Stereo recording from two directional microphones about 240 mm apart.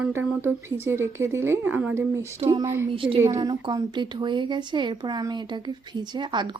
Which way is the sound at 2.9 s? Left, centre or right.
Right.